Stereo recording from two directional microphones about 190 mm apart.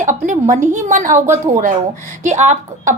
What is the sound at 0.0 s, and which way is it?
A woman's voice, 40° right (ahead or behind).